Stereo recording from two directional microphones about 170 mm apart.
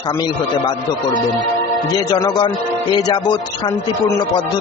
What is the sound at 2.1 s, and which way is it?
Speech, 25° left (ahead or behind).